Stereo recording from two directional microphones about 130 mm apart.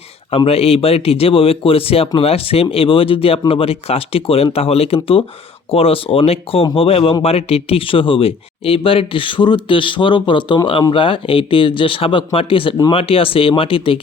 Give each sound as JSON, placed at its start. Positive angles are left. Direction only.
{"t": 0.3, "sound": "speech", "side_deg": 50}